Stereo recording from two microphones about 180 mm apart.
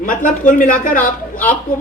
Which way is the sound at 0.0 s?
45° left (ahead or behind).